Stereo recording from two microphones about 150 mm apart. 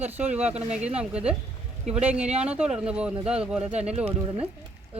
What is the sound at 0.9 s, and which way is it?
Speech, 5° right (ahead or behind).